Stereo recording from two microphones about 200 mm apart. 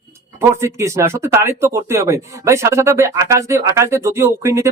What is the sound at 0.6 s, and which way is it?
Speech, 15° right (ahead or behind).